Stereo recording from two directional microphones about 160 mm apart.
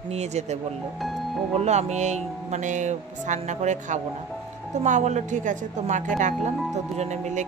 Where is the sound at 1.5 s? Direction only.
45° right (ahead or behind).